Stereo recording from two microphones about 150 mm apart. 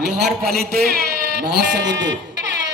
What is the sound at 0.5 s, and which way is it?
Speech, 90° right.